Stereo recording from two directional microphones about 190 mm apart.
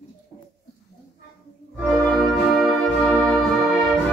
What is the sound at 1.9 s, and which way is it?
Brass instrument, 5° left (ahead or behind).